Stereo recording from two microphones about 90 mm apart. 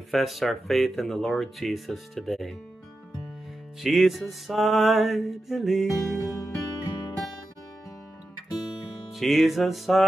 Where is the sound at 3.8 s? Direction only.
Centre (ahead or behind).